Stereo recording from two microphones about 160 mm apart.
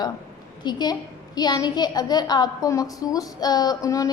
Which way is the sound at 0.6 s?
25° left (ahead or behind).